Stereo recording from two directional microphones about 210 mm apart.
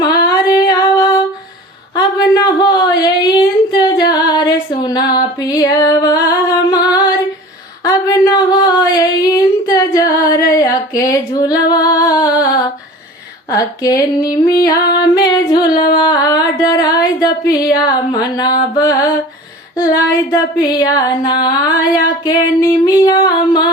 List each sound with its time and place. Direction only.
0.0 s female singing: 15° left (ahead or behind)
2.3 s a sound: 20° left (ahead or behind)
10.2 s female singing: 15° left (ahead or behind)
12.0 s music: 20° left (ahead or behind)
12.4 s female singing: 15° left (ahead or behind)
13.8 s a sound: 15° left (ahead or behind)
15.2 s music: 20° left (ahead or behind)
19.7 s a sound: 15° left (ahead or behind)
22.2 s music: 20° left (ahead or behind)